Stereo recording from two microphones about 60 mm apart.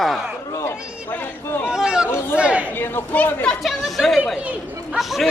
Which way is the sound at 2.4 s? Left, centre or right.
Centre.